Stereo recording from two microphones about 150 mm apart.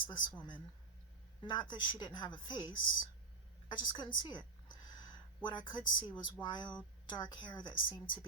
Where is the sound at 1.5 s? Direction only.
30° left (ahead or behind).